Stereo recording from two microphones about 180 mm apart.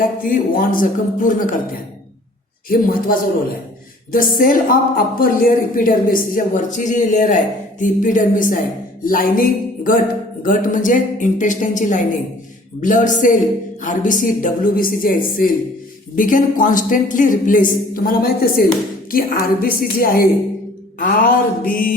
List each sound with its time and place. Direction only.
0.0 s a woman's voice: 50° left (ahead or behind)
2.6 s a woman's voice: 50° left (ahead or behind)
9.0 s a sound: 50° left (ahead or behind)
10.4 s a woman's voice: 50° left (ahead or behind)